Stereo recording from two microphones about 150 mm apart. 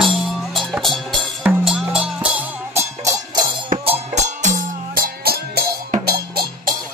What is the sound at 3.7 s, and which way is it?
Music, 60° right (ahead or behind).